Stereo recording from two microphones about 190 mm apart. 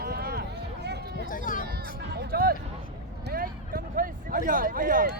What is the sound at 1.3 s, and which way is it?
Speech, 45° left (ahead or behind).